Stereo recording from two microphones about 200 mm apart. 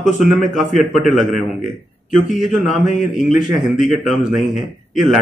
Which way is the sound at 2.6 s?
40° left (ahead or behind).